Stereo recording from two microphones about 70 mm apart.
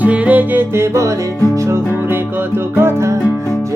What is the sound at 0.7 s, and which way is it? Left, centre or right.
Music, right.